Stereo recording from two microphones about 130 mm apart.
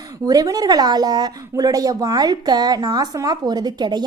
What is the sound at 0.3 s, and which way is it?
A woman's voice, 30° right (ahead or behind).